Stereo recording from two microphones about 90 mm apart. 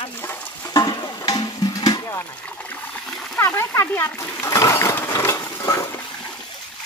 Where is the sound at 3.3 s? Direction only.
30° left (ahead or behind).